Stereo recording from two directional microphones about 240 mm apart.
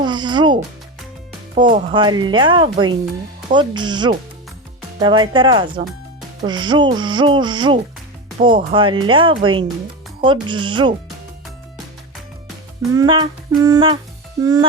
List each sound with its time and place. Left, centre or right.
0.0 s music: centre
1.7 s music: centre
12.9 s speech: centre